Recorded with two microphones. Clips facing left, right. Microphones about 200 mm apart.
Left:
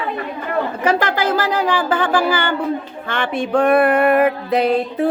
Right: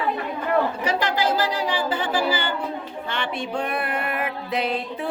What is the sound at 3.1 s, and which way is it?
Music, 50° left (ahead or behind).